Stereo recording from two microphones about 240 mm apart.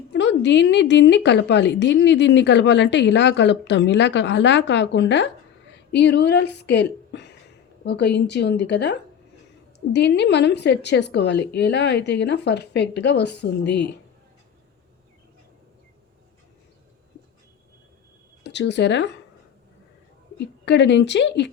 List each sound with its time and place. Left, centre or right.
0.1 s a woman's voice: left
18.4 s a woman's voice: left
20.7 s a woman's voice: left